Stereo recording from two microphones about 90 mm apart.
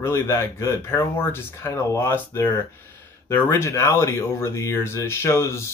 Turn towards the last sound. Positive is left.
turn(degrees=30)  # may be behind; listen again after turning